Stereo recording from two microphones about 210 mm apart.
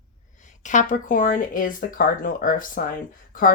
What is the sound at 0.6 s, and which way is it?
Speech, 35° left (ahead or behind).